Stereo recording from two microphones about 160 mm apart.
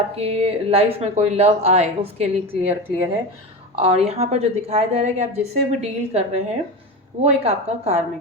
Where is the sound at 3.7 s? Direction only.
40° right (ahead or behind).